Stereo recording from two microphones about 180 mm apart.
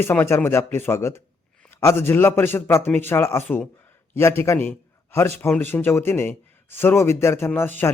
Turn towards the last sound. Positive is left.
turn(degrees=10)  # may be behind; listen again after turning